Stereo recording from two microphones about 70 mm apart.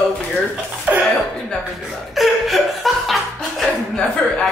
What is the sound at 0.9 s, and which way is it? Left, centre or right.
Speech, centre.